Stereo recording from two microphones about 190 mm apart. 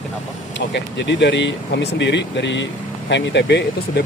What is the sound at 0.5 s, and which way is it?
Speech, 65° left (ahead or behind).